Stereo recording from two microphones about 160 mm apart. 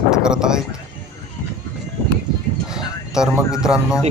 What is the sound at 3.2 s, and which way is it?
Speech, 5° right (ahead or behind).